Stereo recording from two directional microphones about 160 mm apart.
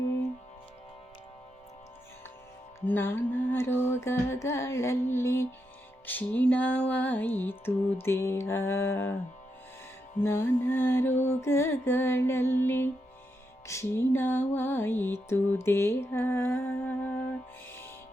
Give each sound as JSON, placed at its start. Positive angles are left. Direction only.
{"t": 2.8, "sound": "music", "side_deg": 15}
{"t": 10.2, "sound": "music", "side_deg": 15}